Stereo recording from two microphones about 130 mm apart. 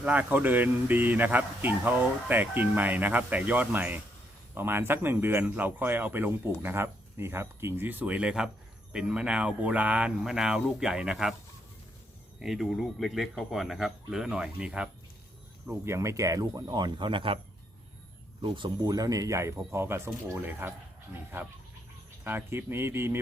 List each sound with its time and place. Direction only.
0.0 s speech: 10° right (ahead or behind)
12.4 s speech: centre (ahead or behind)
15.6 s speech: 20° right (ahead or behind); by 17.4 s 45° right (ahead or behind)
18.4 s speech: 40° right (ahead or behind); by 20.7 s 15° right (ahead or behind)
22.2 s speech: 15° right (ahead or behind)